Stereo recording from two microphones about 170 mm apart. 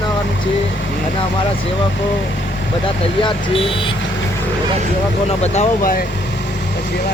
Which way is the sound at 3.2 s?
35° left (ahead or behind).